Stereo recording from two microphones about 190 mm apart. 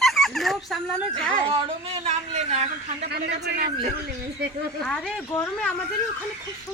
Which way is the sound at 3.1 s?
55° right (ahead or behind).